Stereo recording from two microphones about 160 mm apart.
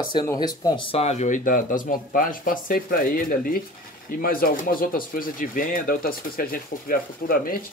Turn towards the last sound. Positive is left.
turn(degrees=65)  # may be behind; listen again after turning